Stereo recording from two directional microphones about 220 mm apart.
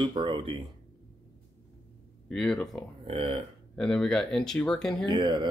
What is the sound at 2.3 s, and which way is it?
Speech, 5° left (ahead or behind).